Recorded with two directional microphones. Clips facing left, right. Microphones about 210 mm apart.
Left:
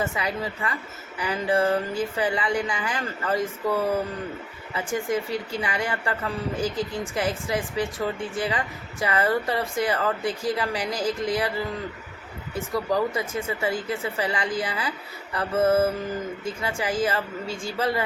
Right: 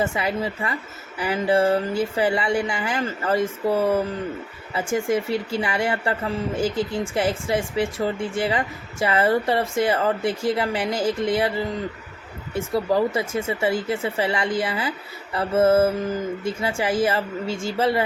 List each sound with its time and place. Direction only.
0.0 s a woman's voice: 30° right (ahead or behind)
12.5 s a woman's voice: 25° right (ahead or behind)